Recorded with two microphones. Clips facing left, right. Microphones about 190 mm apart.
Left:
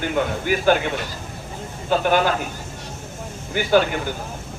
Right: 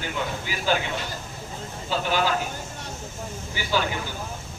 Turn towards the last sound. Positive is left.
turn(degrees=55)  # may be behind; listen again after turning